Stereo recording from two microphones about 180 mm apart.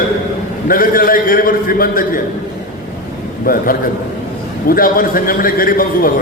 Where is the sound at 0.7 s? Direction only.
50° left (ahead or behind).